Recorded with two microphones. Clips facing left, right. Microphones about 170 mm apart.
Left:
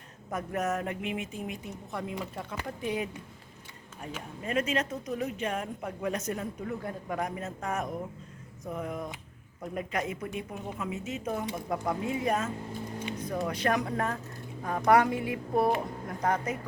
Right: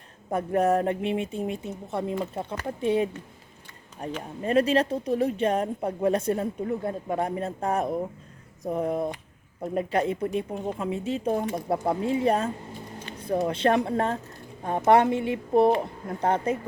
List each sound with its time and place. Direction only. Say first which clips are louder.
0.3 s a woman's voice: right 8 dB; 30° right (ahead or behind)